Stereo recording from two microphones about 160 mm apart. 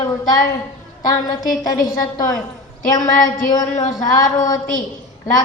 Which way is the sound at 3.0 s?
55° left (ahead or behind).